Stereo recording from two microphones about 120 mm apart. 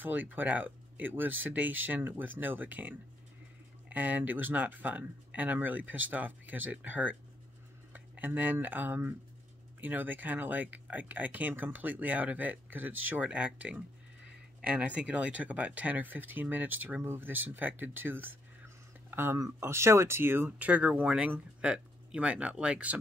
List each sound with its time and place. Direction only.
0.0 s speech: 15° right (ahead or behind)